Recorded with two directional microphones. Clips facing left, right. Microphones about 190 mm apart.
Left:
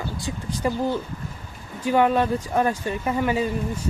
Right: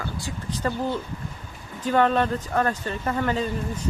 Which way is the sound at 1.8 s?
10° left (ahead or behind).